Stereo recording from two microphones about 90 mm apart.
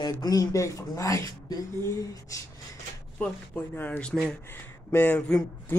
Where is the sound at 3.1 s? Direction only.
20° left (ahead or behind).